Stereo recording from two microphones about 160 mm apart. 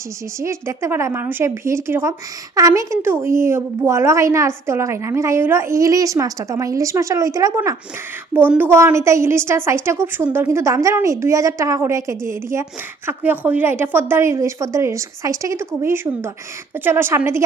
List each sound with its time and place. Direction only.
0.3 s a woman's voice: 20° right (ahead or behind)